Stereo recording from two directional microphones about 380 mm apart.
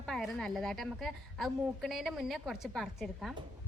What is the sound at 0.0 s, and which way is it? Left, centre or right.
A woman's voice, centre.